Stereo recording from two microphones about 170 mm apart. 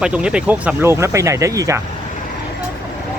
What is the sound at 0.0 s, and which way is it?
Speech, 5° right (ahead or behind).